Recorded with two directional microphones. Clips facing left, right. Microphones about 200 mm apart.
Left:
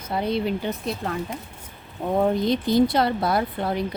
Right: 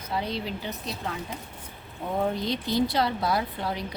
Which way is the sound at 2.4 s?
50° left (ahead or behind).